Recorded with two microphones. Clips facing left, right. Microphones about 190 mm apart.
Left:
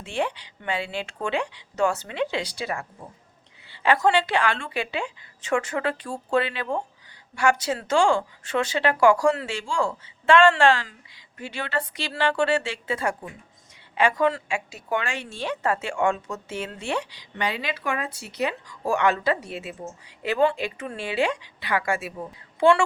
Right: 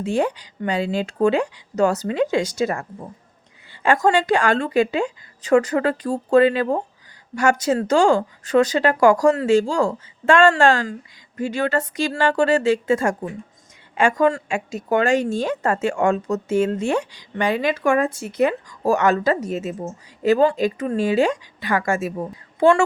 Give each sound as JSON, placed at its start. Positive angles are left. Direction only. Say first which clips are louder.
{"t": 0.0, "sound": "a woman's voice", "louder": "right 7 dB", "side_deg": -40}